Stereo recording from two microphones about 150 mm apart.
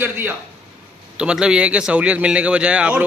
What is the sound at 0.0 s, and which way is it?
A man's voice, 10° right (ahead or behind).